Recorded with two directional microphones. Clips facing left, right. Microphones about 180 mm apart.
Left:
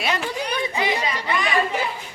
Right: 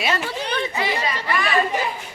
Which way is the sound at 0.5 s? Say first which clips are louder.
Even; 15° left (ahead or behind).